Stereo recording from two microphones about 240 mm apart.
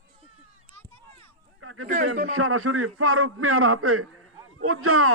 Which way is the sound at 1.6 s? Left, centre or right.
Right.